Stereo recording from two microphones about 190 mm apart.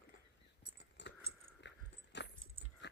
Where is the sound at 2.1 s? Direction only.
65° left (ahead or behind).